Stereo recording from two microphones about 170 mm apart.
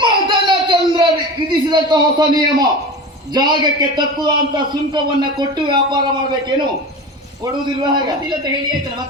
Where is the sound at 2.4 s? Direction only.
25° right (ahead or behind).